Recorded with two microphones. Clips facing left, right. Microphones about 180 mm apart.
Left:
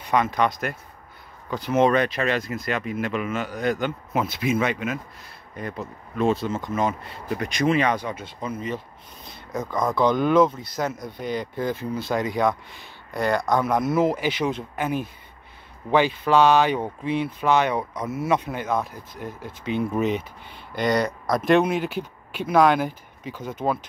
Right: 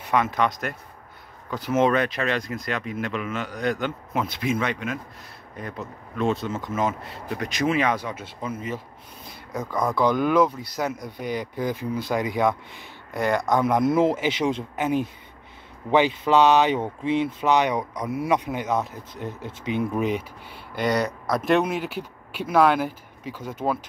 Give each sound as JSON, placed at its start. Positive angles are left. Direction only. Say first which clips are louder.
{"t": 0.0, "sound": "speech", "louder": "left 1 dB", "side_deg": 0}